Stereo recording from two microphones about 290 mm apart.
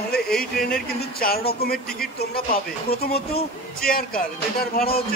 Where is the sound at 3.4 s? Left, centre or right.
Left.